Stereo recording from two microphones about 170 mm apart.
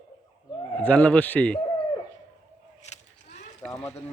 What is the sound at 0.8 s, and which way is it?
Speech, 10° left (ahead or behind).